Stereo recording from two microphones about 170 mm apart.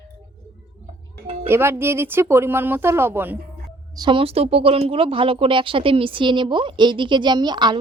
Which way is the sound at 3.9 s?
30° right (ahead or behind).